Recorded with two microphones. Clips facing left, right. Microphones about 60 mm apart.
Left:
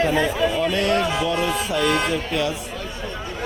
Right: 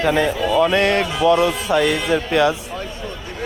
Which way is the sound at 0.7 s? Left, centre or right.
Right.